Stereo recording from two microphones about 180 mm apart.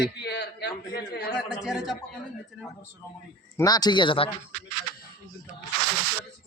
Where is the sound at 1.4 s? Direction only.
Centre (ahead or behind).